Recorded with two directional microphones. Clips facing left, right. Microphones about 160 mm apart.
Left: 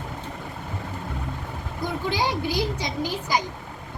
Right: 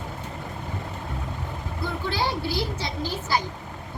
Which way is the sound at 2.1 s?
15° left (ahead or behind).